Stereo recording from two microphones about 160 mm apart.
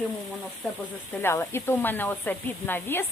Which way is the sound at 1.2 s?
15° left (ahead or behind).